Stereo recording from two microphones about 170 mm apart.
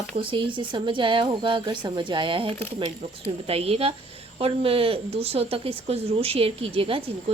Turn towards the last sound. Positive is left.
turn(degrees=-35)  # may be behind; listen again after turning